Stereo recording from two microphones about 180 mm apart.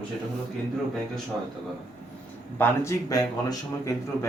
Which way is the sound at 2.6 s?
15° left (ahead or behind).